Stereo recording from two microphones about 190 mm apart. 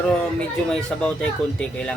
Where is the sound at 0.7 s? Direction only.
5° left (ahead or behind).